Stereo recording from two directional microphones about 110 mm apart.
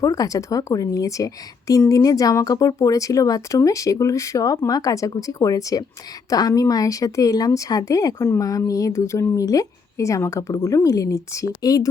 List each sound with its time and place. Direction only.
0.0 s speech: 30° left (ahead or behind)